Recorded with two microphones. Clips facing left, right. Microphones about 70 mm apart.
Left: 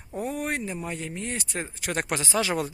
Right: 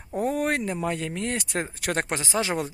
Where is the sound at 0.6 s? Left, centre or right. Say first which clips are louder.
Right 5 dB; right.